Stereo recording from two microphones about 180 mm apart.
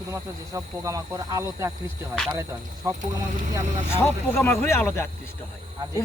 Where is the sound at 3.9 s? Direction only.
15° left (ahead or behind).